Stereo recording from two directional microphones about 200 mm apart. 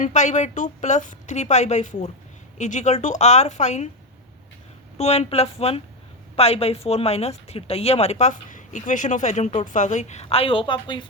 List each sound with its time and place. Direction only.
0.0 s speech: 35° left (ahead or behind)
4.9 s speech: 35° left (ahead or behind)